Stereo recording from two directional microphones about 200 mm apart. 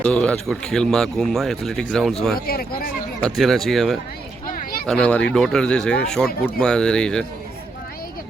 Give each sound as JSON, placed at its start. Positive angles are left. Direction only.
{"t": 0.0, "sound": "speech", "side_deg": 5}
{"t": 2.5, "sound": "speech", "side_deg": 50}
{"t": 3.2, "sound": "speech", "side_deg": 0}